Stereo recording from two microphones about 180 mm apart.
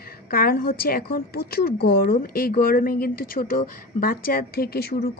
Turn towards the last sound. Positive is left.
turn(degrees=60)  # may be behind; listen again after turning